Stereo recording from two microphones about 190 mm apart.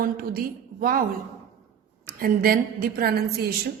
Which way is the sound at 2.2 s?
50° right (ahead or behind).